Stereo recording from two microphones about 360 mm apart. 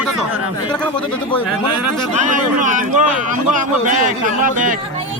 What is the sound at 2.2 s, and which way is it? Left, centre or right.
A man's voice, right.